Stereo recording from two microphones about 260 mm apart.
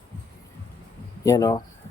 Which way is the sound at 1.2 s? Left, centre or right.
Centre.